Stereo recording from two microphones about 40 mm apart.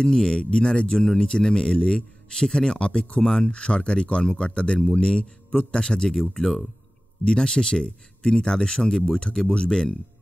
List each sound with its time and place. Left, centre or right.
0.1 s speech: centre
3.5 s a man's voice: left